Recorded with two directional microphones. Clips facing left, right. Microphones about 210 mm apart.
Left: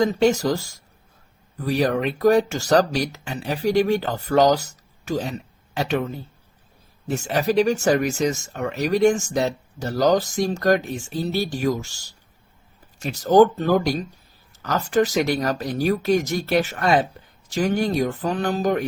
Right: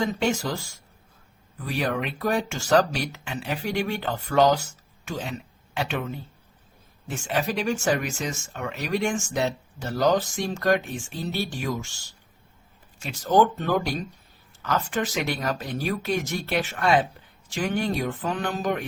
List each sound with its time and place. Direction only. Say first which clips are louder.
0.0 s speech: left 7 dB; 40° left (ahead or behind)